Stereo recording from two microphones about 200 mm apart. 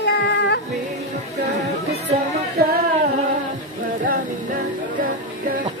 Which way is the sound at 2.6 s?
50° right (ahead or behind).